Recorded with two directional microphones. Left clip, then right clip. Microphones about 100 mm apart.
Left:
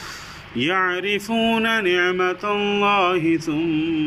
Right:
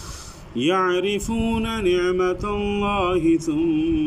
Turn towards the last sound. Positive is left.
turn(degrees=-25)  # may be behind; listen again after turning